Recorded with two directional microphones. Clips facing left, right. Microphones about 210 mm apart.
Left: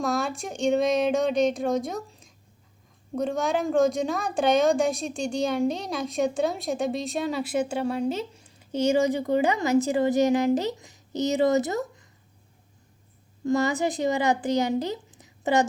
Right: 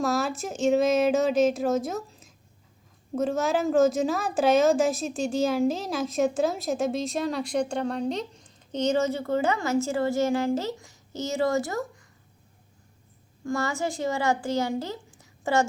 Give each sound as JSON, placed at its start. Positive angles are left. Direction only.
{"t": 0.0, "sound": "a woman's voice", "side_deg": 0}
{"t": 13.4, "sound": "speech", "side_deg": 20}